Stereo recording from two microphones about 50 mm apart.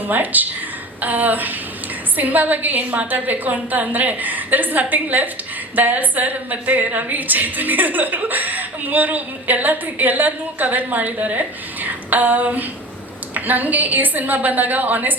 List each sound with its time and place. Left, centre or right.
0.1 s a woman's voice: right